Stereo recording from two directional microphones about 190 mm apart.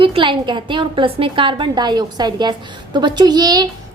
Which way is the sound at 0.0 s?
25° right (ahead or behind).